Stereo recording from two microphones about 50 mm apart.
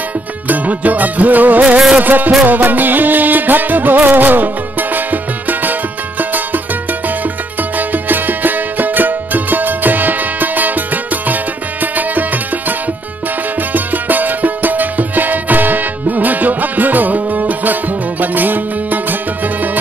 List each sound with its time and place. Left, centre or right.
0.5 s music: right
7.7 s music: right